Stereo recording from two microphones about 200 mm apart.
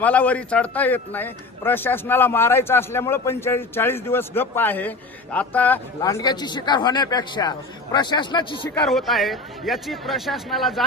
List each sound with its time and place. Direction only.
0.0 s a man's voice: 10° left (ahead or behind)
8.7 s a man's voice: centre (ahead or behind)